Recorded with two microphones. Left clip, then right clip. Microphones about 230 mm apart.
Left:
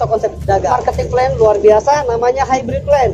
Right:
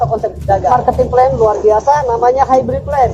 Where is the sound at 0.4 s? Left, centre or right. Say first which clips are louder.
Right 5 dB; left.